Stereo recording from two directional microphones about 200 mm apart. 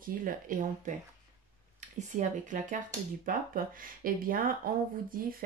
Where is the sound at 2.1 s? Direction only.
40° right (ahead or behind).